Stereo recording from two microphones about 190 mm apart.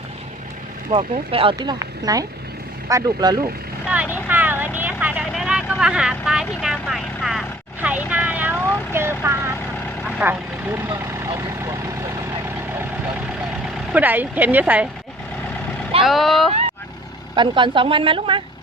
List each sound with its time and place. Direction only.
0.9 s speech: 30° right (ahead or behind)
3.8 s vehicle: 5° right (ahead or behind)
10.2 s speech: 10° right (ahead or behind)
13.9 s speech: 10° right (ahead or behind)
16.0 s speech: centre (ahead or behind)
17.3 s speech: 25° right (ahead or behind)